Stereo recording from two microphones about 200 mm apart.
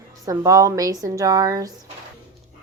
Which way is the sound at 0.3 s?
15° right (ahead or behind).